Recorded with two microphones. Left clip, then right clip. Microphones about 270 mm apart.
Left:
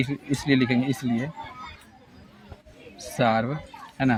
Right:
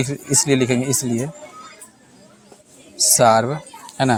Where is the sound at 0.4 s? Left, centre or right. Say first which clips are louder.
Right 2 dB; centre.